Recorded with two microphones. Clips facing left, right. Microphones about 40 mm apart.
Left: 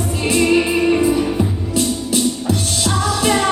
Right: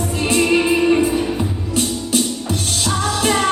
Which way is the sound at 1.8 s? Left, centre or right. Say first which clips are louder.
Left 1 dB; right.